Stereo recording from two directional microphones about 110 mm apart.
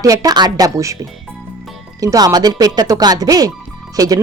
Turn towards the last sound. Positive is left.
turn(degrees=-35)  # may be behind; listen again after turning